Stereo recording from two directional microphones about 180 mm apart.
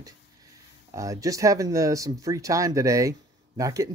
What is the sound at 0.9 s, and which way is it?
Speech, 20° right (ahead or behind).